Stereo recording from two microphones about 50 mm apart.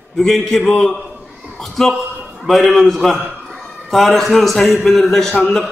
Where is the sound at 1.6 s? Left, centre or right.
Centre.